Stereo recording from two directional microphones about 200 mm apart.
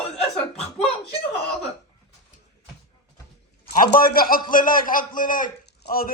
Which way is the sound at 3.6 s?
45° left (ahead or behind).